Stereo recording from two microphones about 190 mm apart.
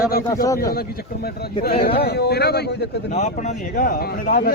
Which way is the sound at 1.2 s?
55° left (ahead or behind).